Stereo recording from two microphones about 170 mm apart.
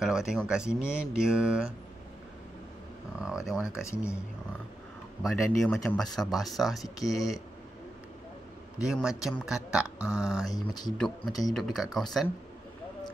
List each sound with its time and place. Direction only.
0.0 s speech: 5° right (ahead or behind)
3.2 s speech: 5° right (ahead or behind)
5.2 s speech: centre (ahead or behind)
8.7 s speech: 5° right (ahead or behind)
10.5 s speech: 25° left (ahead or behind)
11.5 s speech: centre (ahead or behind)